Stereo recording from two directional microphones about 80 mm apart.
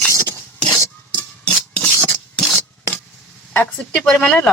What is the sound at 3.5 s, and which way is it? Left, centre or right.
Speech, left.